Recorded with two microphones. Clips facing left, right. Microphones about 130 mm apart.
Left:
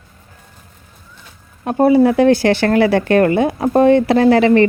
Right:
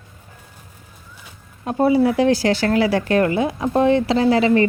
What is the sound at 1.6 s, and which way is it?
Speech, 55° left (ahead or behind).